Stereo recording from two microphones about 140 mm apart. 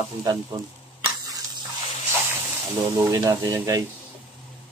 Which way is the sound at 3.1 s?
25° right (ahead or behind).